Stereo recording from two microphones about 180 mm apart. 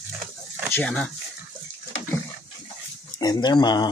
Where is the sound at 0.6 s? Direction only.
5° left (ahead or behind).